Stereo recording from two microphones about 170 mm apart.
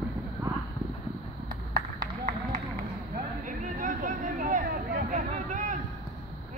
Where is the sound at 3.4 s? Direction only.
50° right (ahead or behind).